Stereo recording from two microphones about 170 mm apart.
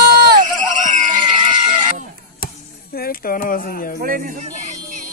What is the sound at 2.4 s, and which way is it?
Chop, 60° left (ahead or behind).